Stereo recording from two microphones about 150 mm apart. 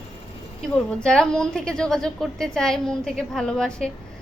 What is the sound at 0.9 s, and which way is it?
A woman's voice, 5° left (ahead or behind).